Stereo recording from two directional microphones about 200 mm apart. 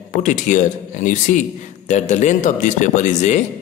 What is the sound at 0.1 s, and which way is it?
Speech, 40° left (ahead or behind).